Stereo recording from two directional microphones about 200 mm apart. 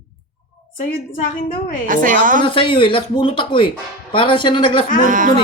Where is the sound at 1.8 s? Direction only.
40° right (ahead or behind).